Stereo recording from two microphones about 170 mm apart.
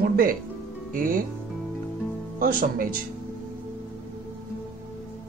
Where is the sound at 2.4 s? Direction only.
55° right (ahead or behind).